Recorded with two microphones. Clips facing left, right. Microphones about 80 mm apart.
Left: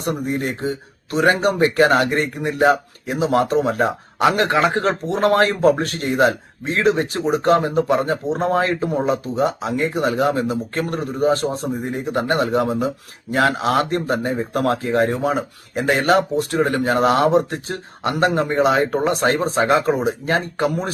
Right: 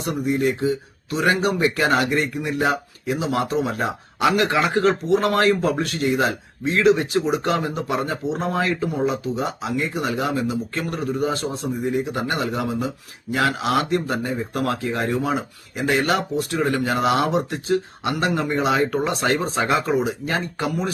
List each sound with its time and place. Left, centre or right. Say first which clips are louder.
0.0 s speech: right 1 dB; left